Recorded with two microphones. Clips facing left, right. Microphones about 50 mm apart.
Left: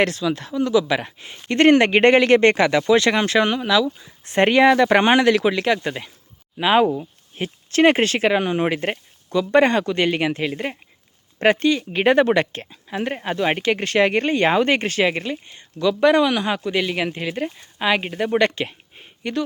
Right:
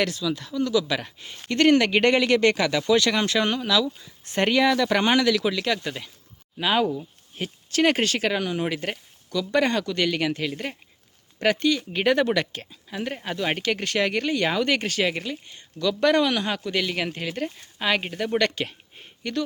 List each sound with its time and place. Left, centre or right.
0.0 s speech: left; by 4.1 s centre
4.3 s speech: left